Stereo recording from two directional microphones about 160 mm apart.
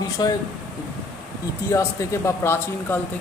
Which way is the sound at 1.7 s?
20° left (ahead or behind).